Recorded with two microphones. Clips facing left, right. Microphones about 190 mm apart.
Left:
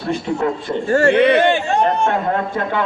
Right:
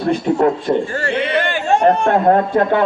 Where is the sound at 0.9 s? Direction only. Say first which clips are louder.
Left 8 dB; 45° left (ahead or behind).